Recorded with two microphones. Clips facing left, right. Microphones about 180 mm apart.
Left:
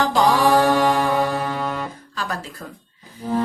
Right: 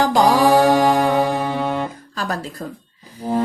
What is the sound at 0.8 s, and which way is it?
Music, 45° right (ahead or behind).